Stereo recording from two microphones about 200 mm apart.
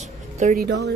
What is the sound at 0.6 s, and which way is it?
Speech, 55° right (ahead or behind).